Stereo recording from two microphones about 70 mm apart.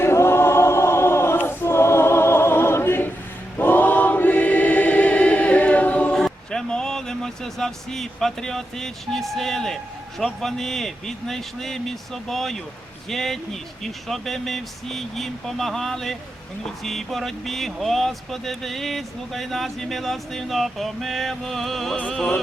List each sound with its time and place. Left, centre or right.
0.0 s choir: left
6.1 s a sound: centre
10.2 s speech: centre